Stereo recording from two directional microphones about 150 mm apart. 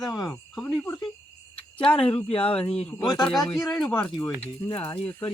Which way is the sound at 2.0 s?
40° left (ahead or behind).